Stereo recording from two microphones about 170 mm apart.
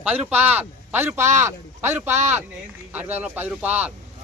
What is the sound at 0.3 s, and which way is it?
A man's voice, 10° right (ahead or behind).